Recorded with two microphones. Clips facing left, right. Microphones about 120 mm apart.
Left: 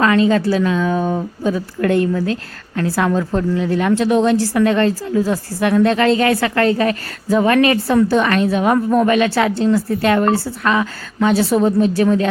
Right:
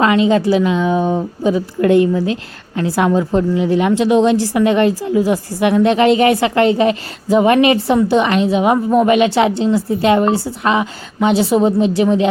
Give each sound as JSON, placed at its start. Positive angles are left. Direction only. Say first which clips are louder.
{"t": 0.0, "sound": "a woman's voice", "louder": "right 1 dB", "side_deg": -20}